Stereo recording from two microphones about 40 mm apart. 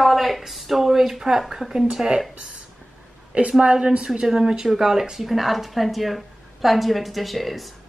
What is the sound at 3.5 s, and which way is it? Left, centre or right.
A woman's voice, right.